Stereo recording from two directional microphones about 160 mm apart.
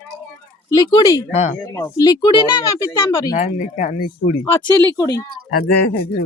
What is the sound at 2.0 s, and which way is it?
Speech, 25° left (ahead or behind).